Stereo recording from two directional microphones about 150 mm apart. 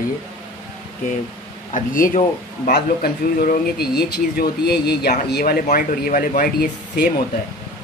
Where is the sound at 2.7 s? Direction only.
90° left.